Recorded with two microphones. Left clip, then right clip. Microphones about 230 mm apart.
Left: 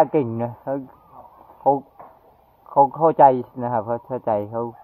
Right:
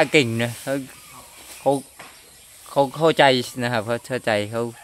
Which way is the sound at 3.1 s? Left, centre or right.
Centre.